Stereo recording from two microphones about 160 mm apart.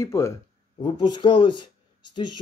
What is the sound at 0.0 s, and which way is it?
Speech, 20° left (ahead or behind).